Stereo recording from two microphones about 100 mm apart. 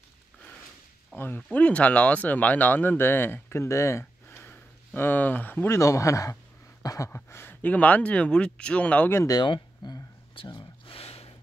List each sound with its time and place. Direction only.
1.1 s speech: 20° left (ahead or behind)
5.8 s speech: 30° left (ahead or behind)
6.8 s a sound: 35° left (ahead or behind)
7.1 s speech: 20° left (ahead or behind)
9.3 s speech: 45° left (ahead or behind)
10.4 s a sound: 55° left (ahead or behind); by 11.3 s 75° left (ahead or behind)